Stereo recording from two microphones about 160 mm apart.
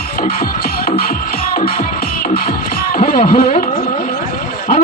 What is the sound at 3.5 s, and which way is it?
Music, 50° left (ahead or behind).